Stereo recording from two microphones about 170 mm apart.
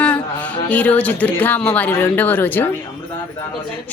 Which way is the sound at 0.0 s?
10° left (ahead or behind).